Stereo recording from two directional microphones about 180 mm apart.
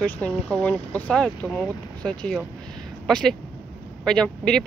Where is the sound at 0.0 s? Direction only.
10° left (ahead or behind).